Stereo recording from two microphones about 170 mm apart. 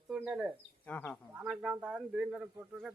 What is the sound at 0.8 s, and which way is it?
Speech, 10° left (ahead or behind).